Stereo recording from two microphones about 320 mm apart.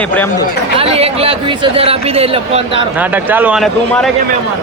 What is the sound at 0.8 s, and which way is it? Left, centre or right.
Speech, centre.